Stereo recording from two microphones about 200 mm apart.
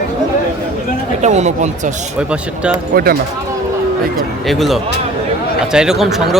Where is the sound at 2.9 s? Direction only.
50° right (ahead or behind).